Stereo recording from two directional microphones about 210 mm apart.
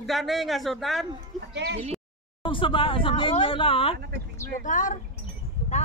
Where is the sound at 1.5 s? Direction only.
55° right (ahead or behind).